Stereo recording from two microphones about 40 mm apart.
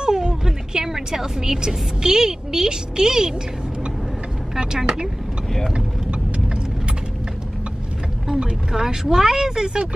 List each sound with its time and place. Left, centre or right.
0.0 s a woman's voice: centre
4.6 s speech: centre
8.4 s speech: centre